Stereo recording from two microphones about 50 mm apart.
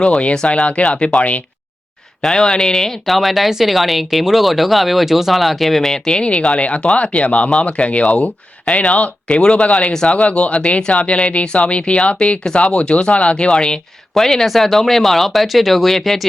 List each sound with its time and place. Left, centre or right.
0.3 s speech: centre
2.2 s speech: centre
6.6 s speech: left
14.1 s speech: centre